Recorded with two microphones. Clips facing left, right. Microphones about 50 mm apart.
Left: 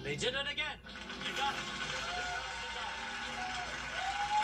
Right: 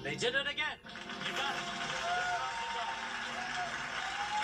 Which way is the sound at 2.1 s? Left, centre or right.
Right.